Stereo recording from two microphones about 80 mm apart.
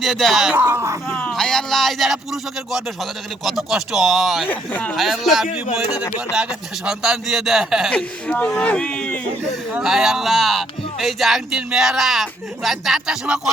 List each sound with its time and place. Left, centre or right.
0.0 s speech: centre
0.5 s speech: right
1.3 s speech: centre
4.4 s speech: centre
4.9 s speech: centre
7.9 s speech: centre
9.8 s speech: centre